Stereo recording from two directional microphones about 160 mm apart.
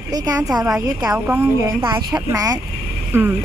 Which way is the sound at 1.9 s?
25° right (ahead or behind).